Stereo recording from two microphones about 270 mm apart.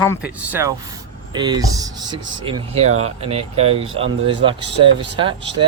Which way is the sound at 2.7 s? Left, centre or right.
Right.